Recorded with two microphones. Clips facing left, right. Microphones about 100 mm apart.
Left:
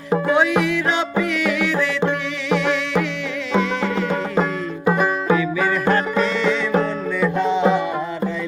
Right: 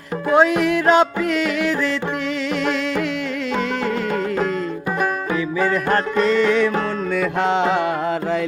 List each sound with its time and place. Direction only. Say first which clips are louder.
0.3 s music: right 7 dB; 45° right (ahead or behind)
5.9 s music: right 2 dB; 45° right (ahead or behind)
7.2 s music: left 1 dB; 90° right